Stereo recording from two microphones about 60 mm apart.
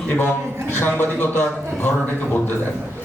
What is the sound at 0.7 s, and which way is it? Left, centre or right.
A man's voice, left.